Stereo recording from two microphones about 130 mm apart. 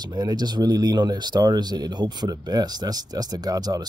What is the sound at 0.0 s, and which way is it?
Speech, 30° right (ahead or behind).